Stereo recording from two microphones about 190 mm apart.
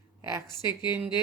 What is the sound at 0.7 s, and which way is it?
Speech, 25° left (ahead or behind).